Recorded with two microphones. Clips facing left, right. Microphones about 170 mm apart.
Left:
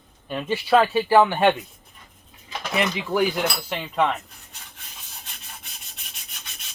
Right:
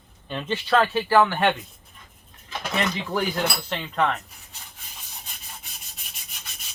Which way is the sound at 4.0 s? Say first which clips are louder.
Left 1 dB; 15° left (ahead or behind).